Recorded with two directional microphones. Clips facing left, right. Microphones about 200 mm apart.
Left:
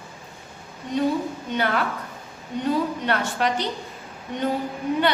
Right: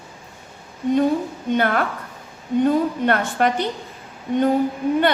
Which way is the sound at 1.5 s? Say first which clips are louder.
Right 5 dB; 50° right (ahead or behind).